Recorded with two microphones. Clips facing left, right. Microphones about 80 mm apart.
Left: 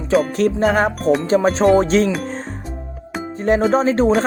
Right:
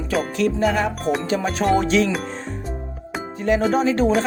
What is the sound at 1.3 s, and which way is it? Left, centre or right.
Music, left.